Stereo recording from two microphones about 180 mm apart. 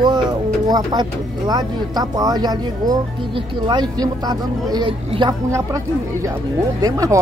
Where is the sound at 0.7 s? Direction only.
20° right (ahead or behind).